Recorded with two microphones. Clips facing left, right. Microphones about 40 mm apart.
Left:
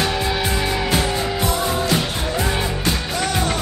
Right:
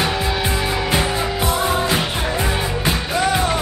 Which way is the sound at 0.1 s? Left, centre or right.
Centre.